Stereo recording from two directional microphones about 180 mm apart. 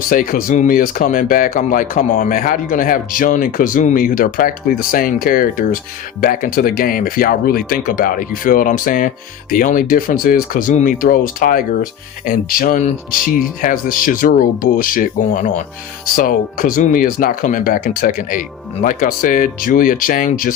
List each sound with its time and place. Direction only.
0.1 s speech: 50° left (ahead or behind)